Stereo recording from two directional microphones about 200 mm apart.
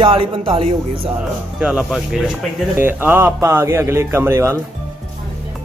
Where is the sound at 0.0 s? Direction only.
25° right (ahead or behind).